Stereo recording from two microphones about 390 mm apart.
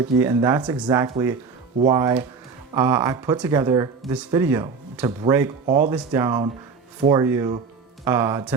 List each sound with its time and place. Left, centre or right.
0.2 s speech: centre
5.6 s speech: centre
6.1 s speech: centre